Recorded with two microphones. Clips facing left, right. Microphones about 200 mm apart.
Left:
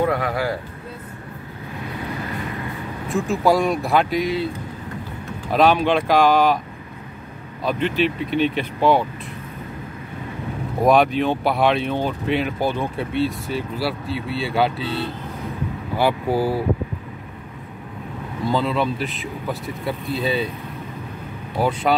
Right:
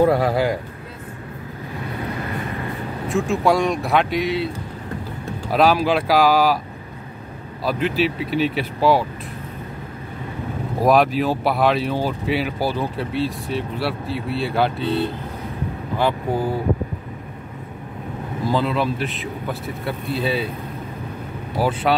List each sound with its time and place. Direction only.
0.0 s a man's voice: 30° right (ahead or behind)
3.1 s speech: centre (ahead or behind)
5.5 s speech: 5° right (ahead or behind)
7.6 s speech: 5° right (ahead or behind)
10.8 s speech: centre (ahead or behind)
18.5 s speech: centre (ahead or behind)
21.5 s speech: 5° right (ahead or behind)